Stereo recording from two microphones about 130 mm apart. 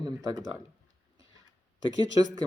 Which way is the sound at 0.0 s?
30° right (ahead or behind).